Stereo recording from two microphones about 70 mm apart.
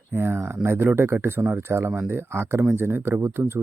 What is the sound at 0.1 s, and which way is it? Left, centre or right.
Speech, right.